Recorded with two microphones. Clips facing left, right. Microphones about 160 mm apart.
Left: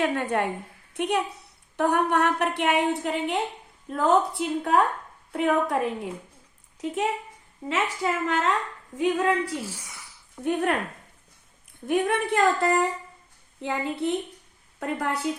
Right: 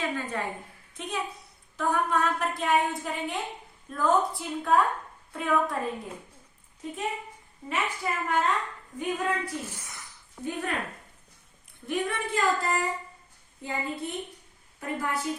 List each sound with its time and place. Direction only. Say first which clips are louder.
0.0 s a woman's voice: left 7 dB; 70° left (ahead or behind)
6.8 s a woman's voice: left 6 dB; 80° left
9.6 s speech: left 3 dB; 10° left (ahead or behind)
10.4 s a woman's voice: left 7 dB; 65° left (ahead or behind)
11.9 s a woman's voice: left 6 dB; 55° left (ahead or behind)